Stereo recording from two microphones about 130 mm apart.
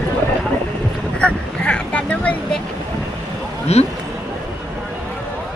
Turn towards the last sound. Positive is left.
turn(degrees=55)  # may be behind; listen again after turning